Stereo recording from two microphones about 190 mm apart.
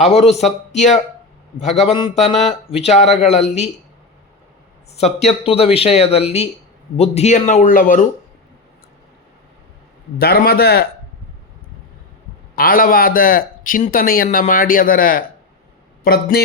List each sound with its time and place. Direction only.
0.0 s speech: 35° left (ahead or behind)
1.9 s speech: 30° left (ahead or behind)
4.9 s speech: 35° left (ahead or behind)
10.2 s a man's voice: 55° left (ahead or behind)
12.5 s a man's voice: 50° left (ahead or behind)